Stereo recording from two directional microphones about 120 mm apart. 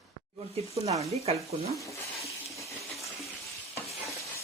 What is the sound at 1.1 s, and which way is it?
Speech, 60° right (ahead or behind).